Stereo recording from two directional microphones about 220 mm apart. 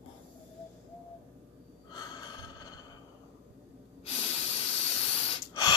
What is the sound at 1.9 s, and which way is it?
Snort, 20° left (ahead or behind).